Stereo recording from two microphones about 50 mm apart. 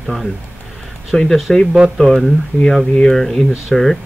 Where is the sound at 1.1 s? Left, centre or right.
Centre.